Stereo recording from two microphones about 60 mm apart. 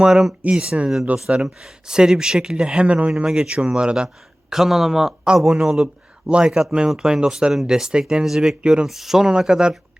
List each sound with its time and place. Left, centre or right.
0.0 s speech: centre
1.3 s speech: right
1.6 s speech: centre